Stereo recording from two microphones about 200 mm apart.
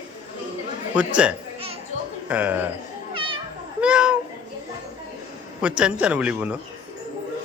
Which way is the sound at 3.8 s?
5° right (ahead or behind).